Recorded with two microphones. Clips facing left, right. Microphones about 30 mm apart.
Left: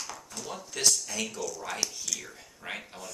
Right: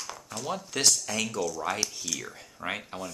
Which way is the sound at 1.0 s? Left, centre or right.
Right.